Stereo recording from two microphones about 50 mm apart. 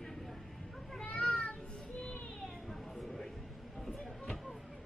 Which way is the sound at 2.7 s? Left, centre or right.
Centre.